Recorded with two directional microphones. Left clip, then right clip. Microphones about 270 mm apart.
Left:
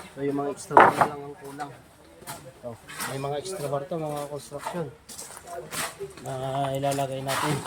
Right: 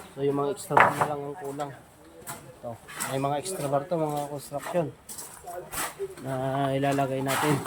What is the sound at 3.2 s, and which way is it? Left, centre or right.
Speech, centre.